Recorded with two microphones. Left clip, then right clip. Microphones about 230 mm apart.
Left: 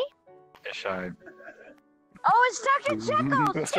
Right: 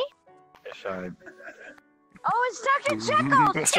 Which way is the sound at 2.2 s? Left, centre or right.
Centre.